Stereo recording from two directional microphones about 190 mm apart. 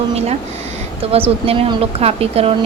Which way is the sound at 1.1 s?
30° right (ahead or behind).